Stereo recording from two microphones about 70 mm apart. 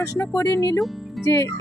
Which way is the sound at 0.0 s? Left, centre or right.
Left.